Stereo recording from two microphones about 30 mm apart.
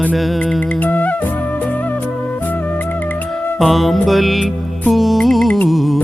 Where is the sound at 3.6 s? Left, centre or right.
Centre.